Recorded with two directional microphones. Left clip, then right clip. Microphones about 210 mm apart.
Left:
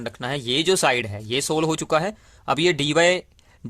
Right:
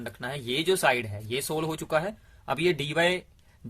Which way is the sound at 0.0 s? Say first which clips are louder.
Left 7 dB; 40° left (ahead or behind).